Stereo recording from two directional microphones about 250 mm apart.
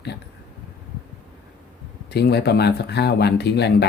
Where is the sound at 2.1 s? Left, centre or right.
Left.